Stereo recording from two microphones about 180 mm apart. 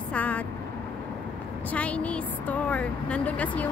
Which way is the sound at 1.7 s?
10° left (ahead or behind).